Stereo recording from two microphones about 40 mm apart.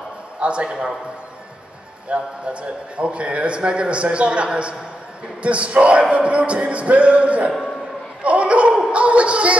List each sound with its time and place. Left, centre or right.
0.4 s a man's voice: right
2.0 s a man's voice: right
8.2 s laughter: right
8.9 s a sound: right